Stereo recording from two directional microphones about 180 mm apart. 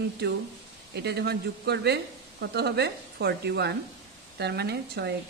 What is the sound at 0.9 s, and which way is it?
Speech, 70° right (ahead or behind).